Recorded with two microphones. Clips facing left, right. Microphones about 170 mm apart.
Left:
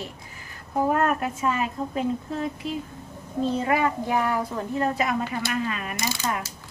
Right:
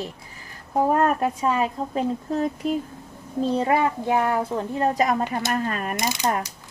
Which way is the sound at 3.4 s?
35° right (ahead or behind).